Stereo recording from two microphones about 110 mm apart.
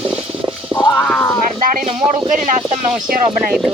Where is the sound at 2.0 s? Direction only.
10° right (ahead or behind).